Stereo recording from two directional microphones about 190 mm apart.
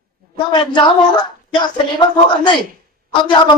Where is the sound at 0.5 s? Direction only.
25° left (ahead or behind).